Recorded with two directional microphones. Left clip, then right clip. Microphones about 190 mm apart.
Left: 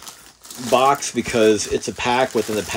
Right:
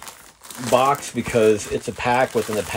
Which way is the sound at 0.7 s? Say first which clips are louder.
Left 2 dB; 15° left (ahead or behind).